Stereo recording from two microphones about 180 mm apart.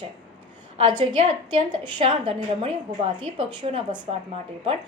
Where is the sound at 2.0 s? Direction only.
30° right (ahead or behind).